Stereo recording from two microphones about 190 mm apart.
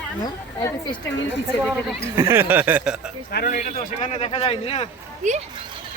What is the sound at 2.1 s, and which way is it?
Speech, 10° right (ahead or behind).